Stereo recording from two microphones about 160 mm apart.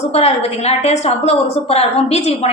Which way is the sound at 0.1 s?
40° left (ahead or behind).